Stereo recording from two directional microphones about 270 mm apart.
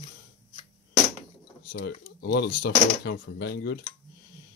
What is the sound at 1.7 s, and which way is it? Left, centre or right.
Speech, left.